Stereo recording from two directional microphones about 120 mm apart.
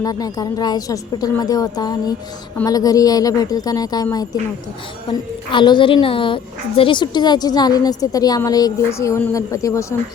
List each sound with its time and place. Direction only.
0.0 s a woman's voice: 30° left (ahead or behind)
5.5 s a woman's voice: 40° left (ahead or behind)